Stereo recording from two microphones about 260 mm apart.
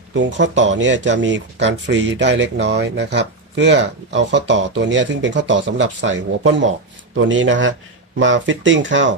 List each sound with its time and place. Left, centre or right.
0.1 s speech: right